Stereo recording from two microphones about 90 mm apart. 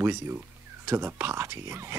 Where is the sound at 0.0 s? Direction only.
30° right (ahead or behind).